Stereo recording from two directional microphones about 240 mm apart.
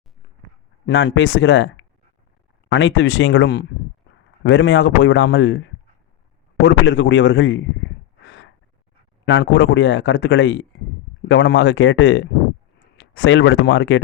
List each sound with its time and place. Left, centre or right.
0.9 s speech: left
8.2 s gasp: left
9.2 s speech: left